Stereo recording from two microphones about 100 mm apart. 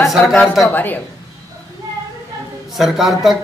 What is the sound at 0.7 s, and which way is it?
Speech, 20° left (ahead or behind).